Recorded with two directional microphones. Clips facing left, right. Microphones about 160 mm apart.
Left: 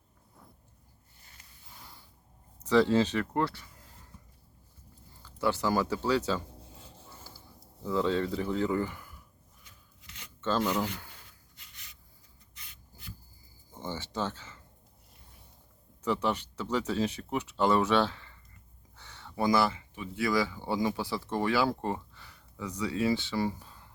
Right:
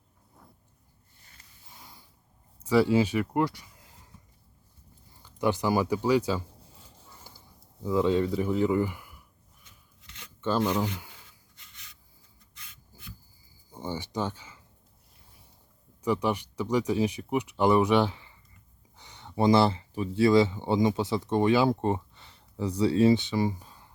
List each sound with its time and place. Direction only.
2.6 s speech: 10° right (ahead or behind)
5.2 s speech: 15° right (ahead or behind)
10.4 s speech: 15° right (ahead or behind)
13.7 s speech: 15° right (ahead or behind)
16.0 s speech: 15° right (ahead or behind)